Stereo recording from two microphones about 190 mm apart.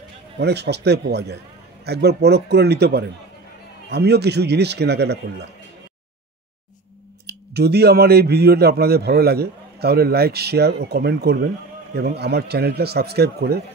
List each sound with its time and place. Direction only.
0.4 s a man's voice: 60° right (ahead or behind)
7.2 s a man's voice: 60° right (ahead or behind)